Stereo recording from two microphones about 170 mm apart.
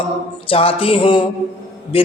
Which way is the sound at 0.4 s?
35° left (ahead or behind).